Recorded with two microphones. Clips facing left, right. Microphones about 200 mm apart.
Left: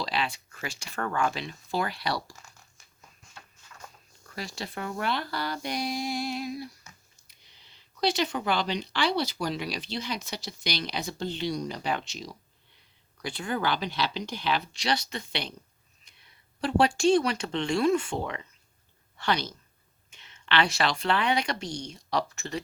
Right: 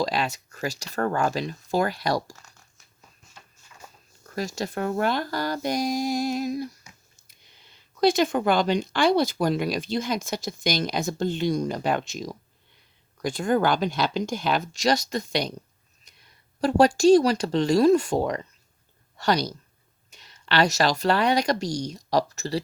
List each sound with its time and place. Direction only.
0.0 s speech: 45° right (ahead or behind)
4.3 s a woman's voice: 45° right (ahead or behind)